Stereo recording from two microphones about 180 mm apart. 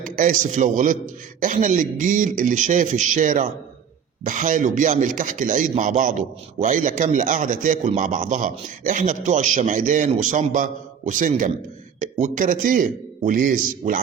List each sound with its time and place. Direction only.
0.0 s a man's voice: 45° right (ahead or behind)